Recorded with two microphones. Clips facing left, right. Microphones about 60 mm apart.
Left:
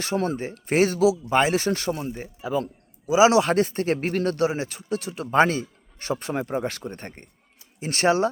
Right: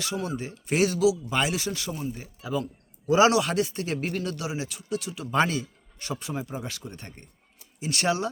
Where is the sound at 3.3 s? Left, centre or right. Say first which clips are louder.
Left 5 dB; left.